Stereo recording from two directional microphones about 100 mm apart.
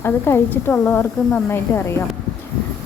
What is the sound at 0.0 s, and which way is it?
A woman's voice, 25° left (ahead or behind).